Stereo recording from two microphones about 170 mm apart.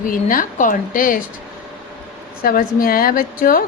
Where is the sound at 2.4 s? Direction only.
60° left (ahead or behind).